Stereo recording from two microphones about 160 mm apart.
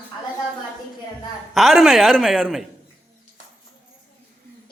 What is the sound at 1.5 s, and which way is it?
A man's voice, centre (ahead or behind).